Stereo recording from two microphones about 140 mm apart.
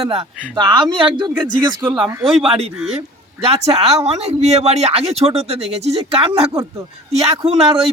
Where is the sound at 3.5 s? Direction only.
45° right (ahead or behind).